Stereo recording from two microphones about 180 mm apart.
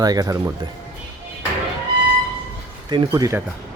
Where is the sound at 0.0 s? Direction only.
20° right (ahead or behind).